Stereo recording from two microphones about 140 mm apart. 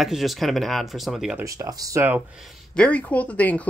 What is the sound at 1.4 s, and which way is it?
Speech, 25° right (ahead or behind).